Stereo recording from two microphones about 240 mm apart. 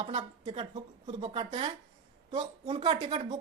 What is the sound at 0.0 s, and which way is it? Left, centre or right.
Speech, right.